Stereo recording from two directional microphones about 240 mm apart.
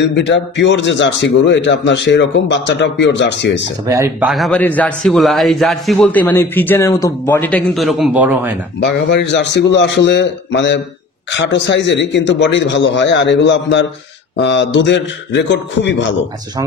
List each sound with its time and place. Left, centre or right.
0.0 s a man's voice: left
3.8 s speech: centre
4.3 s a man's voice: centre
8.7 s a man's voice: left